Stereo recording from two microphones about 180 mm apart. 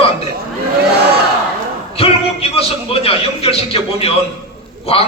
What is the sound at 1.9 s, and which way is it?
A man's voice, 35° left (ahead or behind).